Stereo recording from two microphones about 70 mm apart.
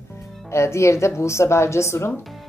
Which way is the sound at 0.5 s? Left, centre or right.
Left.